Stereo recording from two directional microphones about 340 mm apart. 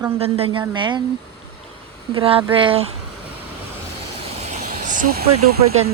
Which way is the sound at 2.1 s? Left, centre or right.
Centre.